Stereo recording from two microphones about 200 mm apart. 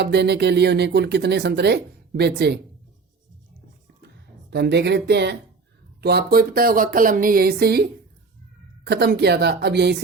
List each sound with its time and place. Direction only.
0.0 s speech: 55° right (ahead or behind)
4.5 s speech: 55° right (ahead or behind)